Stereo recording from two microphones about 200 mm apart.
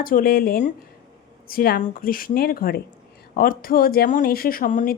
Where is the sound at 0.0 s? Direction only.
45° left (ahead or behind).